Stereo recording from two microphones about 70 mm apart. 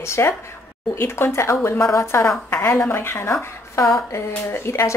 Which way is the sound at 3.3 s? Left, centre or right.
Left.